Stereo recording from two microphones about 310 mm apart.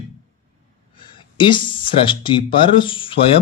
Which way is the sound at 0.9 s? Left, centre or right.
Centre.